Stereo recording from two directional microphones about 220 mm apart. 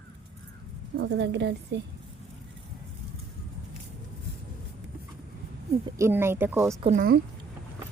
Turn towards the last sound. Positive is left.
turn(degrees=-35)  # may be behind; listen again after turning